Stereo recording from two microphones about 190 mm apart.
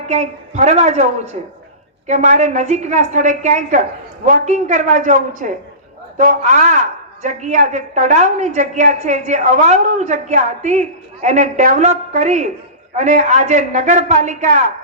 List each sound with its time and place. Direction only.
0.1 s speech: 35° right (ahead or behind)